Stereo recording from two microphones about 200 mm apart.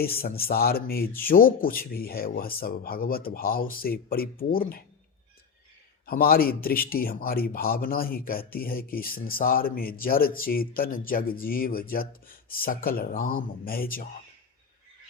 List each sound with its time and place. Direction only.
0.0 s speech: 50° left (ahead or behind)
6.1 s speech: 50° left (ahead or behind)